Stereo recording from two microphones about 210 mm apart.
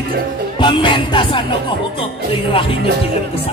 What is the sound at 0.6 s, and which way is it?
Music, 25° left (ahead or behind).